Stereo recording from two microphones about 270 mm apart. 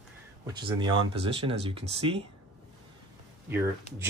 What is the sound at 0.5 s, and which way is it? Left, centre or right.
Speech, centre.